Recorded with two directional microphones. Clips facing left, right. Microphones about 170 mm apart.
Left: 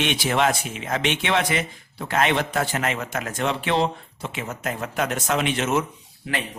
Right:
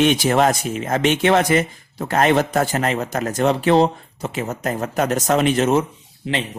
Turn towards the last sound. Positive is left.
turn(degrees=-25)  # may be behind; listen again after turning